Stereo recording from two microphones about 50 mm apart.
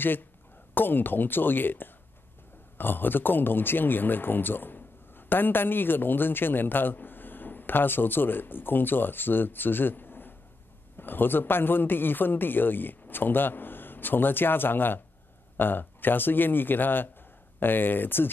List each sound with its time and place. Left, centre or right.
0.7 s a man's voice: left